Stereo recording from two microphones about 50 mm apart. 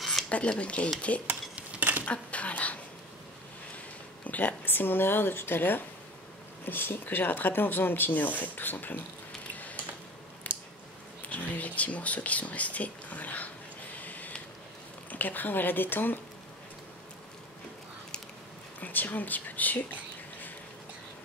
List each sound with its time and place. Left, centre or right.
0.3 s speech: left
1.8 s a sound: right
2.0 s a sound: left
4.3 s speech: left
10.4 s squish: left
11.2 s speech: left
13.9 s a sound: left
15.0 s speech: left
18.8 s speech: left